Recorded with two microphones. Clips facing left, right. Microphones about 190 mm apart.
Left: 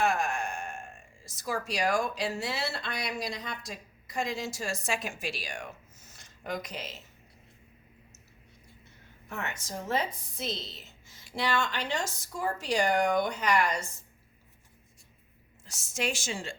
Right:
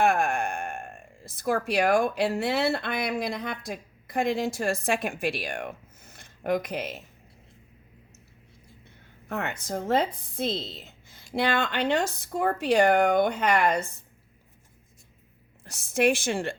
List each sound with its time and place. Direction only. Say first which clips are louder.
0.0 s speech: right 5 dB; 55° right (ahead or behind)
9.3 s speech: right 7 dB; 55° right (ahead or behind)
15.6 s speech: right 10 dB; 55° right (ahead or behind)